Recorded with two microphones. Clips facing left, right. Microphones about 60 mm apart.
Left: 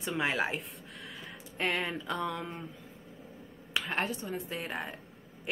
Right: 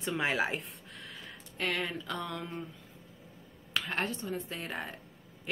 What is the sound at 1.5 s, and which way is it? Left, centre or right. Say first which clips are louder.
Speech: left 2 dB; left.